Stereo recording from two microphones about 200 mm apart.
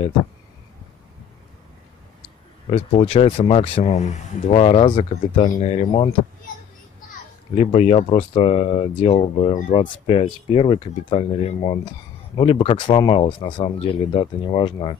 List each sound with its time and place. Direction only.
2.7 s speech: 30° left (ahead or behind)
7.5 s speech: 30° left (ahead or behind)